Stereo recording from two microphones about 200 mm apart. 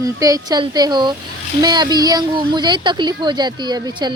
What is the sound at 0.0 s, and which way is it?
A woman's voice, 15° right (ahead or behind).